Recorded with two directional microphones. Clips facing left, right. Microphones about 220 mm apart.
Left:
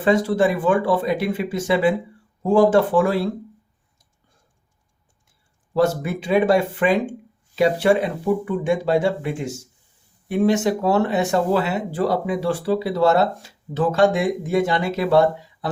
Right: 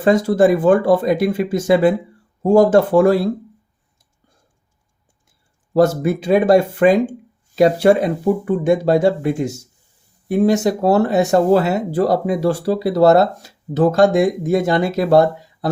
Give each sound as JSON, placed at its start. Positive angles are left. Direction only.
{"t": 0.0, "sound": "speech", "side_deg": -40}
{"t": 5.7, "sound": "speech", "side_deg": -40}